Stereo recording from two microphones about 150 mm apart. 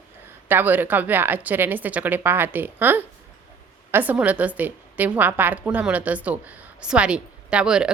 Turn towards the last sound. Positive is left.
turn(degrees=-5)  # may be behind; listen again after turning